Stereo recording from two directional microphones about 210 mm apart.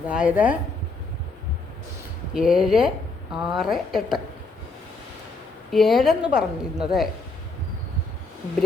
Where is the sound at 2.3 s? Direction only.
Centre (ahead or behind).